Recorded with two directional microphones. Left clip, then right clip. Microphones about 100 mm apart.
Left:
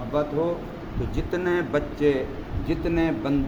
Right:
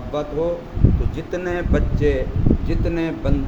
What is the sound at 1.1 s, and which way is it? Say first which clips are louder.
A man's voice: right 1 dB; 30° left (ahead or behind).